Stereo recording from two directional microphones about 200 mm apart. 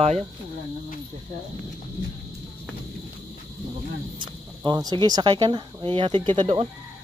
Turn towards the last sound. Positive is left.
turn(degrees=-25)  # may be behind; listen again after turning